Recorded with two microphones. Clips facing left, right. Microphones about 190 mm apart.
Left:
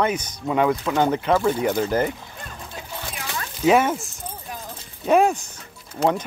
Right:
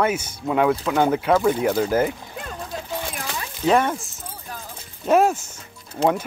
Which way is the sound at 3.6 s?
5° left (ahead or behind).